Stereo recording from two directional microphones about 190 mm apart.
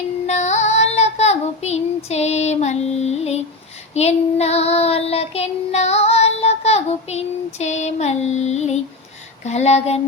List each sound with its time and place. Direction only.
0.3 s child singing: 35° left (ahead or behind)
2.0 s female singing: 35° left (ahead or behind)
3.9 s child singing: 35° left (ahead or behind)
7.6 s female singing: 35° left (ahead or behind)